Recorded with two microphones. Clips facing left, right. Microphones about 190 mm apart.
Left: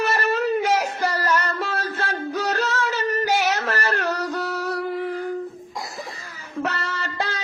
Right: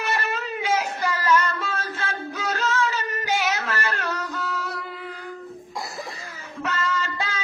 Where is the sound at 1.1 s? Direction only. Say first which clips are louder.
Right 1 dB; 40° left (ahead or behind).